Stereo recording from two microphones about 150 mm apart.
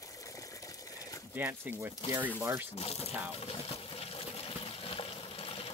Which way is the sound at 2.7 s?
45° left (ahead or behind).